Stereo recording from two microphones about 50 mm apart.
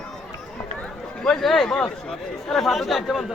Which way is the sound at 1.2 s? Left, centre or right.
Centre.